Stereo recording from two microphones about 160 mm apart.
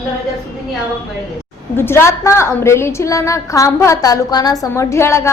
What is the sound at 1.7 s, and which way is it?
A woman's voice, 15° left (ahead or behind).